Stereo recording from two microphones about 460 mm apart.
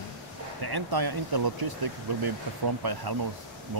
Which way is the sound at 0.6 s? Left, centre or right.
Right.